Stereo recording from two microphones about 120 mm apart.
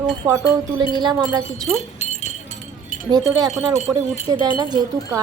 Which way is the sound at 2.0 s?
70° left (ahead or behind).